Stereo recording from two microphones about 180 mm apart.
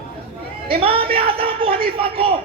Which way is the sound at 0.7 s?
30° right (ahead or behind).